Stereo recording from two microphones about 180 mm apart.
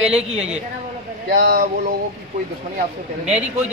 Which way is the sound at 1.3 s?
45° right (ahead or behind).